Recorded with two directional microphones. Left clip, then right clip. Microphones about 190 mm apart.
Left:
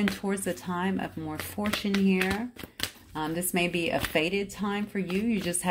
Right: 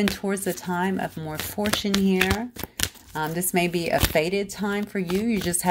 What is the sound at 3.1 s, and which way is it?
Speech, 35° right (ahead or behind).